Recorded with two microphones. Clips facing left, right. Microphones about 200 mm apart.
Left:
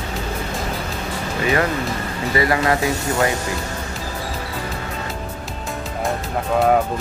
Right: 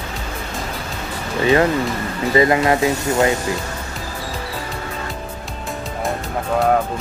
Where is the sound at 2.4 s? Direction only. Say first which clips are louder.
Right 4 dB; 20° right (ahead or behind).